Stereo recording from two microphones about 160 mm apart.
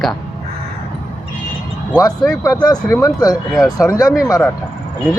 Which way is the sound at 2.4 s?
20° left (ahead or behind).